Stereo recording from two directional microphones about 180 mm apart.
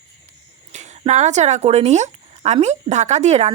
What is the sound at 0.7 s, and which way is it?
Speech, 40° right (ahead or behind).